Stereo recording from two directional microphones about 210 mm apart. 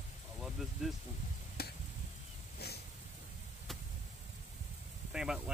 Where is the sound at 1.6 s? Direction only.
50° left (ahead or behind).